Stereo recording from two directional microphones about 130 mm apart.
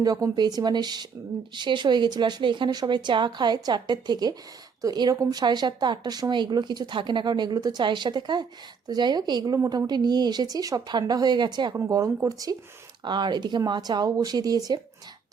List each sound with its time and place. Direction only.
0.0 s speech: 30° right (ahead or behind)
11.7 s speech: 25° right (ahead or behind)